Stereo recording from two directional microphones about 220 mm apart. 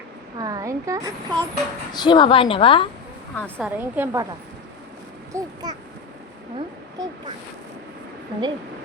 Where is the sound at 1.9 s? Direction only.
20° left (ahead or behind).